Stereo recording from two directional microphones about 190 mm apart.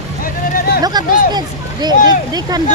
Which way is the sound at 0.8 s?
20° right (ahead or behind).